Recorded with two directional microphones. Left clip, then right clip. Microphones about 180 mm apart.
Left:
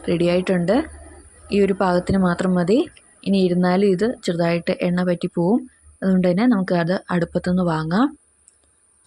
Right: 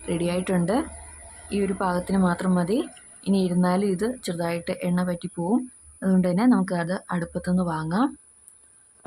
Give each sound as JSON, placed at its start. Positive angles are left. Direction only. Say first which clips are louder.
{"t": 0.0, "sound": "speech", "louder": "left 8 dB", "side_deg": 20}